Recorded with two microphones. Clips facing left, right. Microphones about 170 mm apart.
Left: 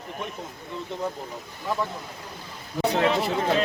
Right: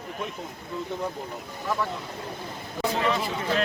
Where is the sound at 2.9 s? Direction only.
70° left (ahead or behind).